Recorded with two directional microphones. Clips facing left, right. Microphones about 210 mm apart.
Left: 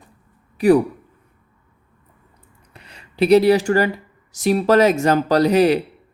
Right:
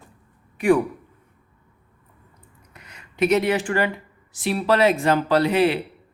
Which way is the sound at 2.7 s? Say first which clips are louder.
Left 3 dB; 30° left (ahead or behind).